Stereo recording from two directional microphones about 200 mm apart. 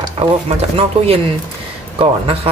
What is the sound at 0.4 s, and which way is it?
Speech, 30° right (ahead or behind).